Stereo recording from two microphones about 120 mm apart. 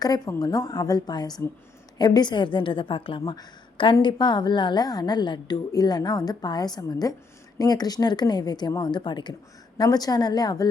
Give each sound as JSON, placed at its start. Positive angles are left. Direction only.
{"t": 0.0, "sound": "a woman's voice", "side_deg": 30}